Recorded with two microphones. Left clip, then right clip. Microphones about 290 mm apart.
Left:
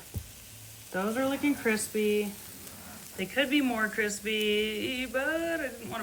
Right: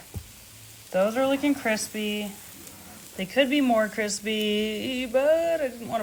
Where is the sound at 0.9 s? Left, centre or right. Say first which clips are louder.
Right 7 dB; right.